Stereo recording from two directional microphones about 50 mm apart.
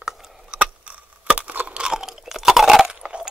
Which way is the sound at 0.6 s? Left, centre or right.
Right.